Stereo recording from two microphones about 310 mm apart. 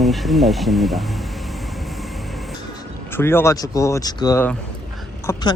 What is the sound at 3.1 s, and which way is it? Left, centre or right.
Speech, centre.